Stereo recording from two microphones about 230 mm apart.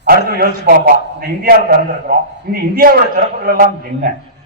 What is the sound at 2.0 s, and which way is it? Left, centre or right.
A man's voice, right.